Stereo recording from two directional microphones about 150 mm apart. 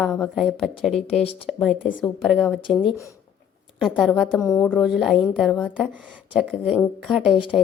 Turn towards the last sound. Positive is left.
turn(degrees=0)  # may be behind; listen again after turning